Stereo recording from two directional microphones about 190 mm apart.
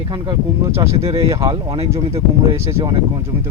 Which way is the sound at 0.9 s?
35° right (ahead or behind).